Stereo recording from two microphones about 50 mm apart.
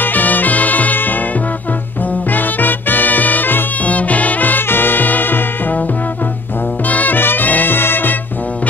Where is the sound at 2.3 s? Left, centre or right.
Left.